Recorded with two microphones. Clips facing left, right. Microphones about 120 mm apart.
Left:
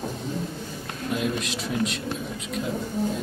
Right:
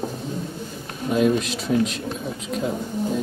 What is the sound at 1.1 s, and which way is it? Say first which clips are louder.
Speech: right 9 dB; 45° right (ahead or behind).